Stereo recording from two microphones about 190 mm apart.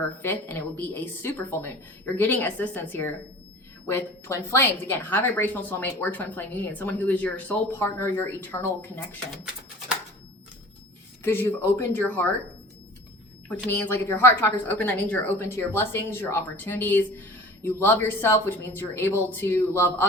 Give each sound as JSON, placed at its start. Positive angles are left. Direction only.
{"t": 0.2, "sound": "a woman's voice", "side_deg": 10}
{"t": 11.2, "sound": "a woman's voice", "side_deg": 10}
{"t": 13.7, "sound": "a woman's voice", "side_deg": 10}